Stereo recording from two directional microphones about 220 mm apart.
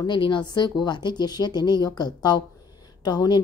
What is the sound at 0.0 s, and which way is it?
A woman's voice, 20° left (ahead or behind).